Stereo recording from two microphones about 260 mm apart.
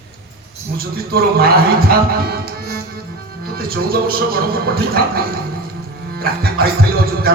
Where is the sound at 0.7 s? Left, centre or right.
Right.